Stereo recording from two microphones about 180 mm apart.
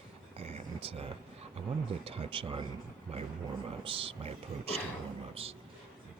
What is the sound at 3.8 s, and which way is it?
Speech, 30° right (ahead or behind).